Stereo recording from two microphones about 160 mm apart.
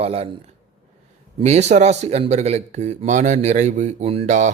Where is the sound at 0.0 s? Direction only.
40° right (ahead or behind).